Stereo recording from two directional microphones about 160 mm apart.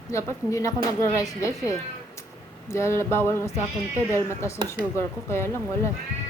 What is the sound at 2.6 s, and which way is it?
Speech, 15° left (ahead or behind).